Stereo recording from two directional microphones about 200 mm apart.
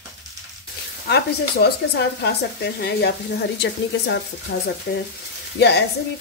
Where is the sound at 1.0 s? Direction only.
55° left (ahead or behind).